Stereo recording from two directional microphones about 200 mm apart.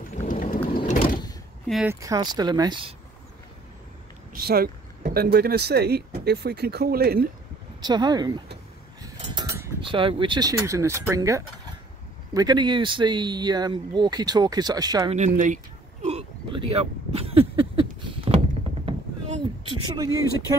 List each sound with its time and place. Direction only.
0.3 s thunder: 40° left (ahead or behind)
0.7 s vehicle: 45° left (ahead or behind)
1.7 s speech: 5° right (ahead or behind)
2.0 s speech: 20° right (ahead or behind)
4.5 s speech: 50° right (ahead or behind)
7.8 s speech: 20° right (ahead or behind)
9.0 s a sound: 20° right (ahead or behind)
9.8 s speech: 25° right (ahead or behind)
15.1 s a sound: 40° right (ahead or behind); by 20.2 s 20° right (ahead or behind)